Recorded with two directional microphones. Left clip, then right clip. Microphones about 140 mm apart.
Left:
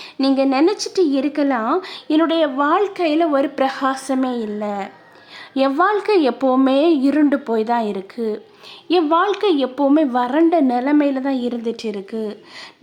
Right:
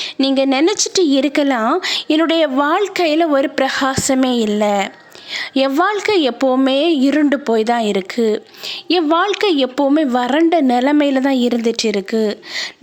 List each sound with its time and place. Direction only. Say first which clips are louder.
0.0 s a woman's voice: right 2 dB; 25° right (ahead or behind)